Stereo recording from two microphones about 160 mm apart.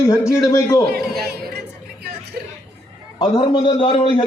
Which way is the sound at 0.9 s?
75° right (ahead or behind).